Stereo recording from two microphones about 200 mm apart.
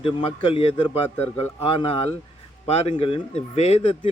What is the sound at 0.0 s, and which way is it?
Speech, 25° left (ahead or behind).